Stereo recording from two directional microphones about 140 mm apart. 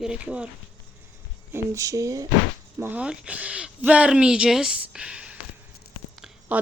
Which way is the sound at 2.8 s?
10° right (ahead or behind).